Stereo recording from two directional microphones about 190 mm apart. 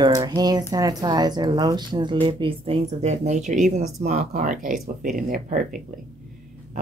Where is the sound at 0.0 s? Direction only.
20° right (ahead or behind).